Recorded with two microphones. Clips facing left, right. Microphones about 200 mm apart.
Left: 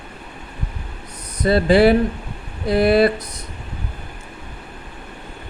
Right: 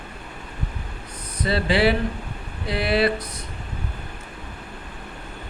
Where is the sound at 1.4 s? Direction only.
45° left (ahead or behind).